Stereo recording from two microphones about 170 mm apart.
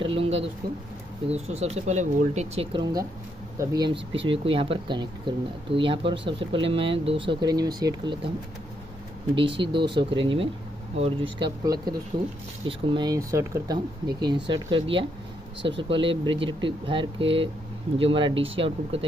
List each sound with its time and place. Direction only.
0.0 s a sound: 30° right (ahead or behind)
1.3 s speech: 40° right (ahead or behind)
9.3 s speech: 30° right (ahead or behind)